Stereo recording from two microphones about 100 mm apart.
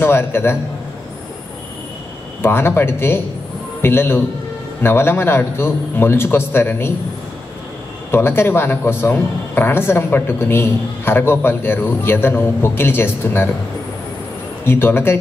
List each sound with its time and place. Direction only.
0.0 s a man's voice: 20° left (ahead or behind)
2.4 s a man's voice: 25° left (ahead or behind)
8.1 s a man's voice: 25° left (ahead or behind)
14.6 s a man's voice: 25° left (ahead or behind)